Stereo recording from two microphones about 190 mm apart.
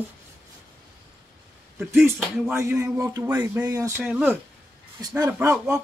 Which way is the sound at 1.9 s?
10° right (ahead or behind).